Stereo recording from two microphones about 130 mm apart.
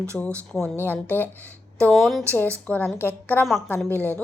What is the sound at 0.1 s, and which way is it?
Speech, 5° left (ahead or behind).